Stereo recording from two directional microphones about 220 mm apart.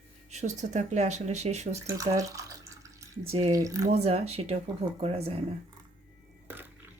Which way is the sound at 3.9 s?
30° right (ahead or behind).